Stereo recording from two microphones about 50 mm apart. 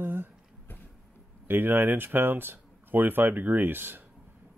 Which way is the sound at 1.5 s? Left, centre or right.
Right.